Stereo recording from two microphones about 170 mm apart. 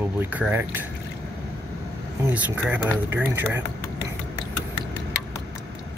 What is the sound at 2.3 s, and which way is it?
Speech, 10° right (ahead or behind).